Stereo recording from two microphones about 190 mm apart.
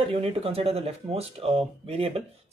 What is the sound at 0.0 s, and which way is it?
Speech, 30° right (ahead or behind).